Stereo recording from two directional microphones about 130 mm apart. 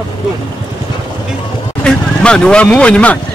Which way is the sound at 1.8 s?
5° left (ahead or behind).